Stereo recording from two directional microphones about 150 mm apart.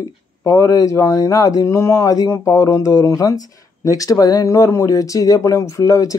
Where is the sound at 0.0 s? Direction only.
20° left (ahead or behind).